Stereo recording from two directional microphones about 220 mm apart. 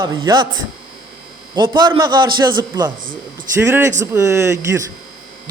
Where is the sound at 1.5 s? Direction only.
20° right (ahead or behind).